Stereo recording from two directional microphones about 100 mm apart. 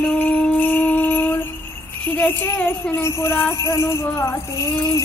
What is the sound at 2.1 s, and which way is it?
Jingle bell, 20° left (ahead or behind).